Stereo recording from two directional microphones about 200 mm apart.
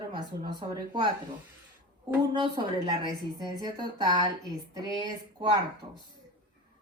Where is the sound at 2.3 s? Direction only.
20° right (ahead or behind).